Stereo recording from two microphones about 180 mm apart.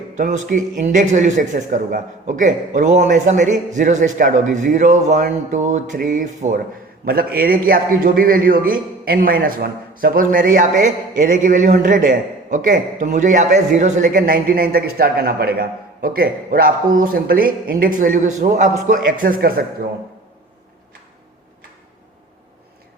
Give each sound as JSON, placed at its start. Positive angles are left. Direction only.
{"t": 0.2, "sound": "a man's voice", "side_deg": -45}
{"t": 7.0, "sound": "a man's voice", "side_deg": -55}